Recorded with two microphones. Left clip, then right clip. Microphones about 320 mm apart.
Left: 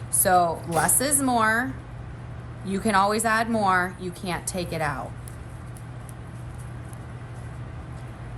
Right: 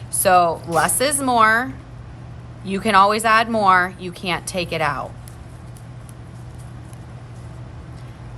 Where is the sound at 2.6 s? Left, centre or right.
Centre.